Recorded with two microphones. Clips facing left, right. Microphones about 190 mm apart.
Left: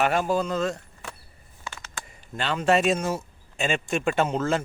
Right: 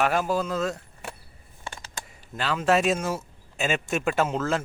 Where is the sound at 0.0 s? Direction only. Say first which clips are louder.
Left 1 dB; centre (ahead or behind).